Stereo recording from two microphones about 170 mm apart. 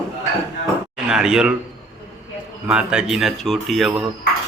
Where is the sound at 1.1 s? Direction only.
5° right (ahead or behind).